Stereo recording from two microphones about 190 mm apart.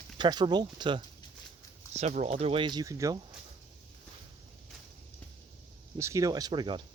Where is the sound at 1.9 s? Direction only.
35° right (ahead or behind); by 3.2 s 15° right (ahead or behind).